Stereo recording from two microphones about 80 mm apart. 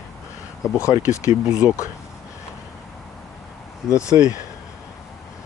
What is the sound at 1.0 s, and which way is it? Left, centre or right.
Speech, left.